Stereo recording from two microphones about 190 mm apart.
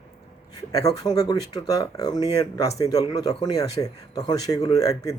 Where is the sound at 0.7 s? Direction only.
20° left (ahead or behind).